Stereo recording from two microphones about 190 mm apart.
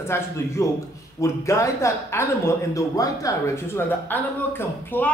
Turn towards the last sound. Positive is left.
turn(degrees=10)  # may be behind; listen again after turning